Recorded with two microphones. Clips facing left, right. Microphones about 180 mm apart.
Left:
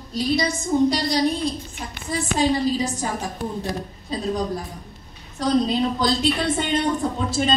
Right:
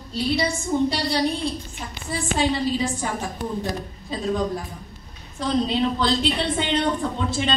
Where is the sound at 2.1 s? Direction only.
40° left (ahead or behind).